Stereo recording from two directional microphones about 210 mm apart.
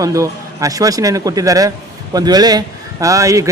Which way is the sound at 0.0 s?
15° right (ahead or behind).